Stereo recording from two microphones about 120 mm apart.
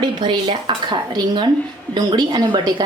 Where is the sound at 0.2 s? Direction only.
40° right (ahead or behind).